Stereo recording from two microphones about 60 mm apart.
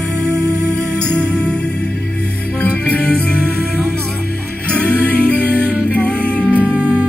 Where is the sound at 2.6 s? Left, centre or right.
Left.